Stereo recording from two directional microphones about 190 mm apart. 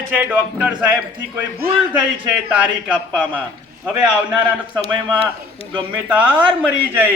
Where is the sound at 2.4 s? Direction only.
5° right (ahead or behind).